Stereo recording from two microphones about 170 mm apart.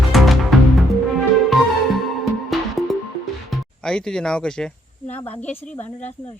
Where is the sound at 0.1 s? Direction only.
Centre (ahead or behind).